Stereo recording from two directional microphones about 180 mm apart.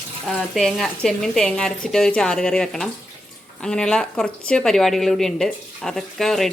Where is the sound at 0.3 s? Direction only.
Centre (ahead or behind).